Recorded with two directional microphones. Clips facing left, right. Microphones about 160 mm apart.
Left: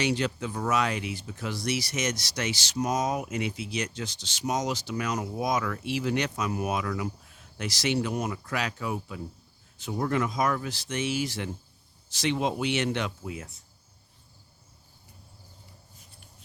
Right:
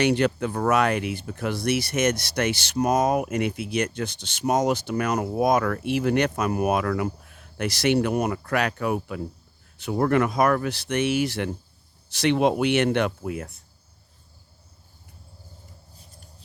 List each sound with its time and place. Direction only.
0.0 s speech: 60° right (ahead or behind)